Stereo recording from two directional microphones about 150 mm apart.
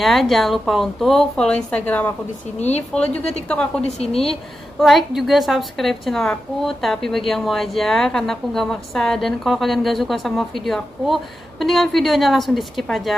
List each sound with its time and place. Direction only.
0.0 s a woman's voice: centre (ahead or behind)
3.8 s a woman's voice: 40° left (ahead or behind)
4.3 s a woman's voice: centre (ahead or behind)